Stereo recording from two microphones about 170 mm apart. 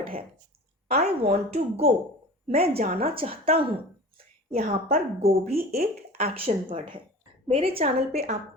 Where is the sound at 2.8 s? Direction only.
60° right (ahead or behind).